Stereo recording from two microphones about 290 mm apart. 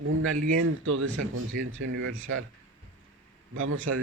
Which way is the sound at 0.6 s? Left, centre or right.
Right.